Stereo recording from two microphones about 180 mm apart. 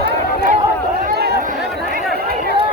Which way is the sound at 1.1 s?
65° right (ahead or behind).